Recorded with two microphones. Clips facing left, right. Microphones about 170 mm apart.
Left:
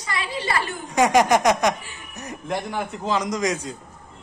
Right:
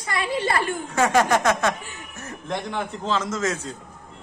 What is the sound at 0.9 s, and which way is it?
Speech, 15° left (ahead or behind).